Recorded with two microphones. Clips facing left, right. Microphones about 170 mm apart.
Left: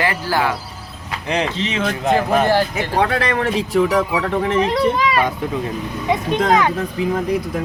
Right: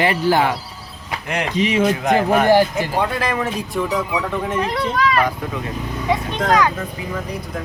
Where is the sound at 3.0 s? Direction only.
80° left.